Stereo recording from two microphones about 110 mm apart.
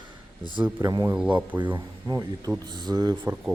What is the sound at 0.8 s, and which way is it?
Speech, 30° right (ahead or behind).